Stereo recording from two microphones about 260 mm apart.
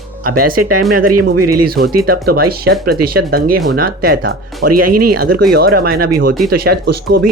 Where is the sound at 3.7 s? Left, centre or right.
Right.